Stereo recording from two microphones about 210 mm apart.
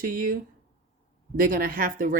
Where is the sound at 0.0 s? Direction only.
40° right (ahead or behind).